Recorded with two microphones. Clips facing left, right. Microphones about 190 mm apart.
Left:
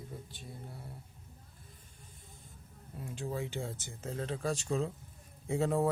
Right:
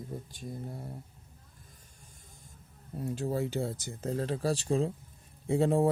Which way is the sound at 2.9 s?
40° right (ahead or behind).